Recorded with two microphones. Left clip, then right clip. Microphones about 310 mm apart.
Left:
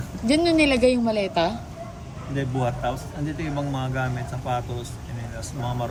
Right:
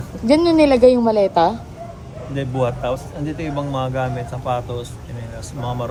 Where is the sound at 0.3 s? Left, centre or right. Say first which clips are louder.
Right 6 dB; centre.